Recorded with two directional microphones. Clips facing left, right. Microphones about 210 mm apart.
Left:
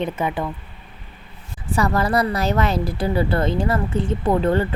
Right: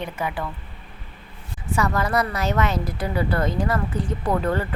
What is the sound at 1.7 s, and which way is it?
Speech, 35° left (ahead or behind).